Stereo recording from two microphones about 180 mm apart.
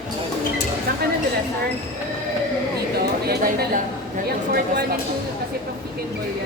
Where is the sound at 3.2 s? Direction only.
60° right (ahead or behind).